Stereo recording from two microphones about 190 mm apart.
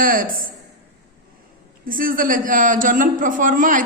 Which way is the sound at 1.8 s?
45° right (ahead or behind).